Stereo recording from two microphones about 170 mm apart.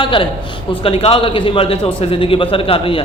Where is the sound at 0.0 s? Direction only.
30° left (ahead or behind).